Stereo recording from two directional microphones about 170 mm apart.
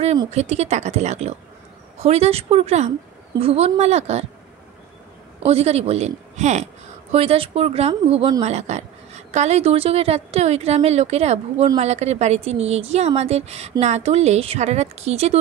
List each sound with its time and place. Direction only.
0.3 s a woman's voice: 40° right (ahead or behind)
5.4 s a woman's voice: 35° right (ahead or behind)